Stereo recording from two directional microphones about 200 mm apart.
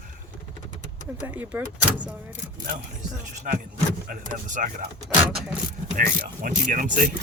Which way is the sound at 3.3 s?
40° right (ahead or behind).